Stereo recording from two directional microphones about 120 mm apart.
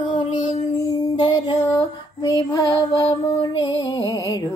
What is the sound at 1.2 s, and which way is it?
Mantra, 40° left (ahead or behind).